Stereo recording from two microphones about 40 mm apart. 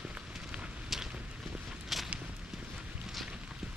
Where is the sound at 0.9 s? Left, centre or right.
Centre.